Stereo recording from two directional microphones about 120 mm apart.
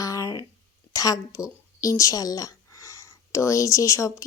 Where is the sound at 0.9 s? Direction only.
30° left (ahead or behind).